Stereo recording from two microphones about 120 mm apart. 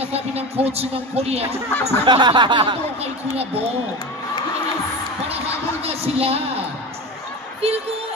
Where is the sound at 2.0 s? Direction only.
40° right (ahead or behind).